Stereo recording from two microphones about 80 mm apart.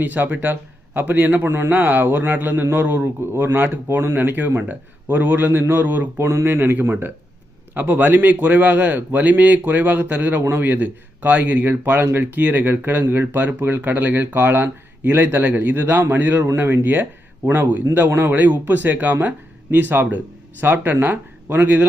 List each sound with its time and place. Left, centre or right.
0.0 s speech: right
6.1 s speech: right
16.4 s speech: right
16.6 s speech: right